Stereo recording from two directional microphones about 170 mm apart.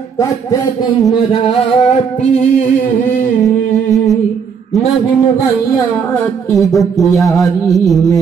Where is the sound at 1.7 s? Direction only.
40° left (ahead or behind).